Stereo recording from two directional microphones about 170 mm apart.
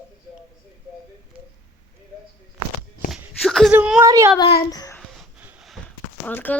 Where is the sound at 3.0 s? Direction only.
Centre (ahead or behind).